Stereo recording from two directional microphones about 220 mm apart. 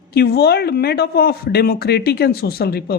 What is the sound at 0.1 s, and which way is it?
Speech, 45° left (ahead or behind).